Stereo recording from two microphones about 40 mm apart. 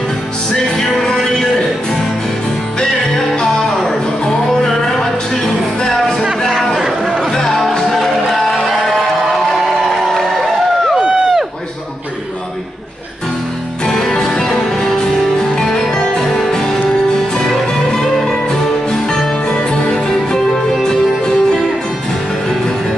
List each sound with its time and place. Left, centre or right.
0.7 s music: centre
2.8 s music: centre
6.8 s chatter: centre
7.3 s music: centre
10.0 s a sound: centre
13.8 s music: centre
20.3 s music: centre